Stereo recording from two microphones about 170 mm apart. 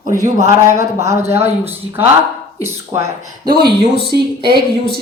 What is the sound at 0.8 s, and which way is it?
Speech, 15° right (ahead or behind).